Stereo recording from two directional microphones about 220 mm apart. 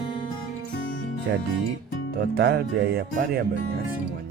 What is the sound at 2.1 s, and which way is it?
Speech, 45° right (ahead or behind).